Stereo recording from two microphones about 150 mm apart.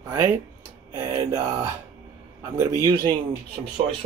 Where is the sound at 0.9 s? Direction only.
20° right (ahead or behind).